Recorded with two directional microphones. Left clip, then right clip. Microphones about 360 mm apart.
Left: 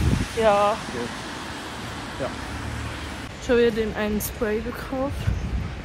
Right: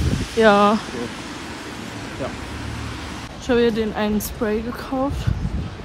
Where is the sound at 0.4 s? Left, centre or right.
Right.